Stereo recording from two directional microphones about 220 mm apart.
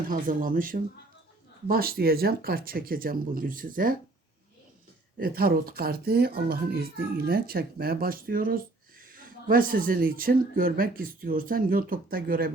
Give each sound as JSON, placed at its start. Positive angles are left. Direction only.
{"t": 0.1, "sound": "speech", "side_deg": -40}
{"t": 5.1, "sound": "speech", "side_deg": -45}